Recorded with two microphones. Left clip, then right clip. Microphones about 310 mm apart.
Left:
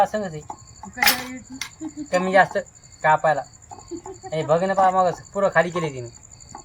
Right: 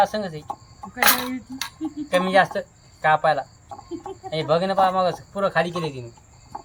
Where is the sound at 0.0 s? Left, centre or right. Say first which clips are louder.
Even; centre.